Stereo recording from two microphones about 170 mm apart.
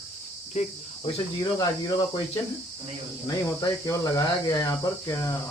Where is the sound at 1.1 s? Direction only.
25° left (ahead or behind).